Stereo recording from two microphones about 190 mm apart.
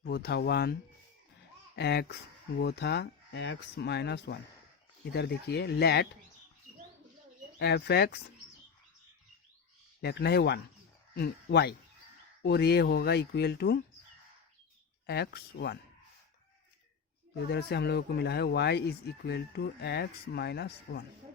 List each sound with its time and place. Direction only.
0.0 s speech: 55° left (ahead or behind)
7.6 s speech: 60° left (ahead or behind)
10.0 s speech: 60° left (ahead or behind)
15.0 s speech: 55° left (ahead or behind)
17.3 s speech: 60° left (ahead or behind)